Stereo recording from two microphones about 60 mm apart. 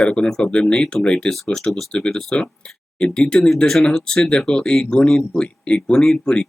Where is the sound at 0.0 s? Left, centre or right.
Centre.